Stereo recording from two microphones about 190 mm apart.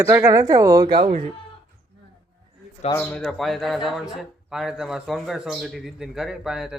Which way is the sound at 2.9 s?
10° left (ahead or behind).